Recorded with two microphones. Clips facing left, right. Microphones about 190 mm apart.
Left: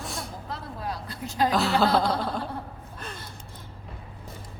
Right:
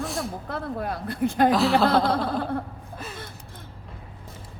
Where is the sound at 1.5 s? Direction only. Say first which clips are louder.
Right 3 dB; centre (ahead or behind).